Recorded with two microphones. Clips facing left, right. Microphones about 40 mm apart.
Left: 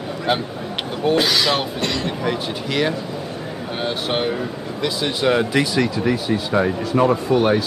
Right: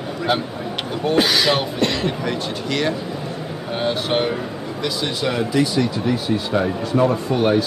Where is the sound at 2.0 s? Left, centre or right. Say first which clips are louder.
Even; centre.